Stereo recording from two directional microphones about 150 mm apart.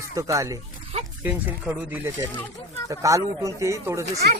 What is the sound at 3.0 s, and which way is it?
Speech, 20° right (ahead or behind).